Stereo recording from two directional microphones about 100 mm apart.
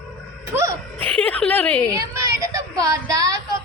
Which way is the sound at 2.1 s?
35° right (ahead or behind).